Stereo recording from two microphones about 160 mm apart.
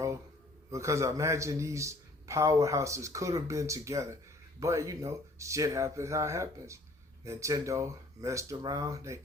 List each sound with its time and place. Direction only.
0.7 s a man's voice: 20° right (ahead or behind)